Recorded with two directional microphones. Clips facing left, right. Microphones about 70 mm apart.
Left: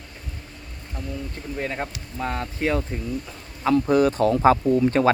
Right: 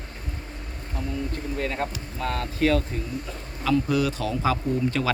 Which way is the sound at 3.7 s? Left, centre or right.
Left.